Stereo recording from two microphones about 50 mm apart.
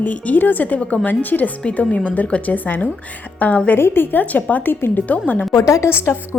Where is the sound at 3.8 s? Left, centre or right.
Left.